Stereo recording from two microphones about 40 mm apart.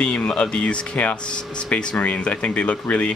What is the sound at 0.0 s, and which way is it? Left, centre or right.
Speech, left.